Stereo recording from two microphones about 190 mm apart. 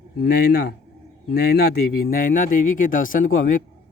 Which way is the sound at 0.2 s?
60° left (ahead or behind).